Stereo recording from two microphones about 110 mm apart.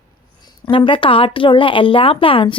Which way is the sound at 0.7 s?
50° left (ahead or behind).